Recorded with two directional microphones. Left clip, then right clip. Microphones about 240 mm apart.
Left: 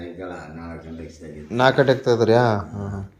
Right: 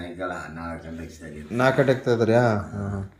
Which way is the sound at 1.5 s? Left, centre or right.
Centre.